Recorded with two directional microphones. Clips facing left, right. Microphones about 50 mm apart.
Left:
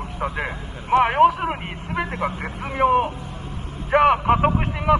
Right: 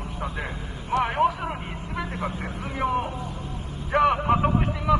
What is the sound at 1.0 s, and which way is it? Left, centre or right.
A man's voice, left.